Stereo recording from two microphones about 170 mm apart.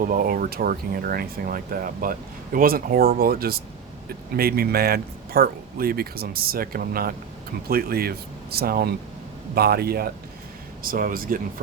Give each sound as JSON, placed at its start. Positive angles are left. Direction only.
{"t": 0.0, "sound": "speech", "side_deg": -55}